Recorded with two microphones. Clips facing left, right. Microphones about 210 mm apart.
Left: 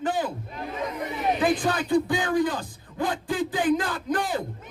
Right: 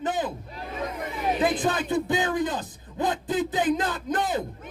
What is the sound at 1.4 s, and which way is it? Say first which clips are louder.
A man's voice: even; 20° right (ahead or behind).